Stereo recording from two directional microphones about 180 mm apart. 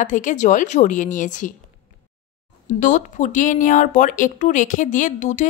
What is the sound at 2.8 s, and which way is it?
A woman's voice, 45° left (ahead or behind).